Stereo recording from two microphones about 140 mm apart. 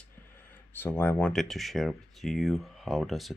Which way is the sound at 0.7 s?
15° left (ahead or behind).